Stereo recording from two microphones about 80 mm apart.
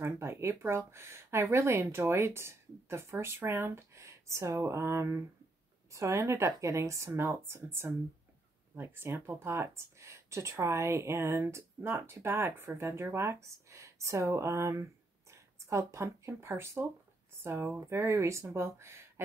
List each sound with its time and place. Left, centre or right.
0.0 s speech: right